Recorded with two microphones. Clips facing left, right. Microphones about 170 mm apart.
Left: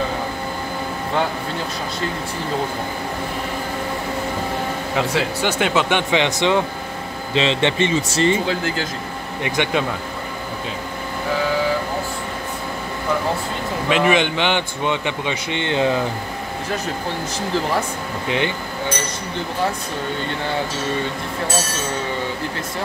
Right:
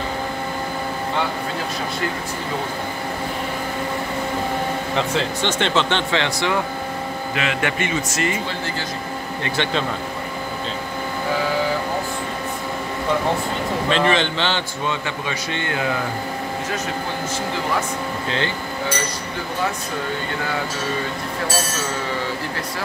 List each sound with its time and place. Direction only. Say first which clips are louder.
4.9 s speech: left 3 dB; 10° left (ahead or behind); by 8.4 s 30° left (ahead or behind)
9.4 s speech: left 3 dB; 15° left (ahead or behind)
13.8 s speech: left 3 dB; 10° left (ahead or behind)